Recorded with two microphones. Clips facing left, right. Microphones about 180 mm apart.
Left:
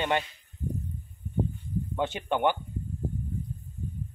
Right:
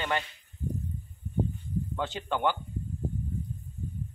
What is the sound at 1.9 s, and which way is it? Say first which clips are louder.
Speech: left 5 dB; 20° left (ahead or behind).